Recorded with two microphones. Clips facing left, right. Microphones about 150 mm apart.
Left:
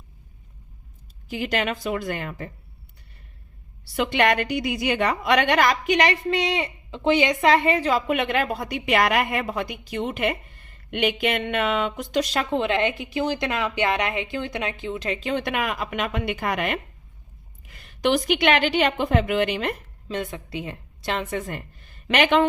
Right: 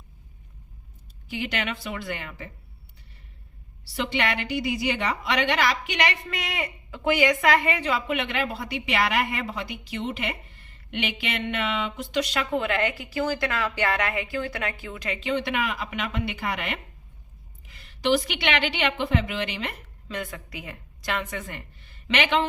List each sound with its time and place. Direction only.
1.3 s a woman's voice: 40° left (ahead or behind)
3.9 s a woman's voice: 50° left (ahead or behind)
12.5 s a woman's voice: 25° left (ahead or behind)
15.2 s a woman's voice: 45° left (ahead or behind)
20.1 s a woman's voice: 25° left (ahead or behind); by 22.4 s 50° left (ahead or behind)